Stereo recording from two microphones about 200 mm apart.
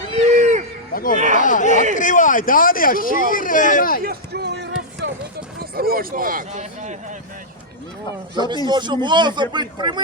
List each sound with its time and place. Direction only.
0.1 s a sound: 35° right (ahead or behind)
0.9 s speech: 45° left (ahead or behind)
1.7 s a man's voice: 35° right (ahead or behind)
2.0 s speech: 40° left (ahead or behind)
4.0 s a sound: 50° right (ahead or behind)
5.7 s speech: 50° right (ahead or behind)
8.6 s speech: 20° right (ahead or behind)